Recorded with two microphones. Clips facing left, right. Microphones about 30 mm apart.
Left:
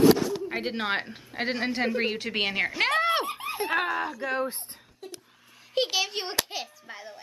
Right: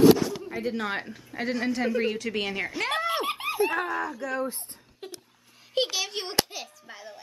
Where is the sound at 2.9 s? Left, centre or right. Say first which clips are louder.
Left 2 dB; left.